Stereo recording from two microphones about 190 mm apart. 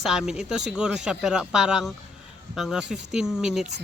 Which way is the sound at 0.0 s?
Centre (ahead or behind).